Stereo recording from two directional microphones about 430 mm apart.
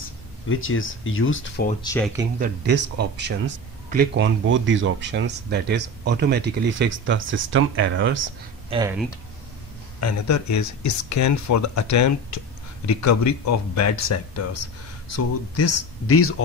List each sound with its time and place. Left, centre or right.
0.5 s speech: left; by 2.0 s centre
2.4 s speech: right
8.6 s speech: centre
9.9 s speech: left